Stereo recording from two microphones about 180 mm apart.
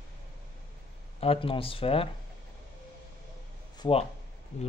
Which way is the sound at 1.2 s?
30° left (ahead or behind).